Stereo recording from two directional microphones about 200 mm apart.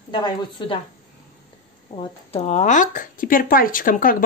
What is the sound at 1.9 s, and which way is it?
Speech, 30° left (ahead or behind).